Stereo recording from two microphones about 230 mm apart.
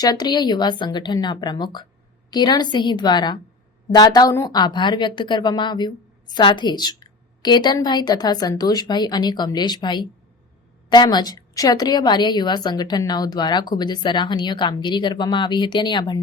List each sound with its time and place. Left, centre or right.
0.0 s a woman's voice: centre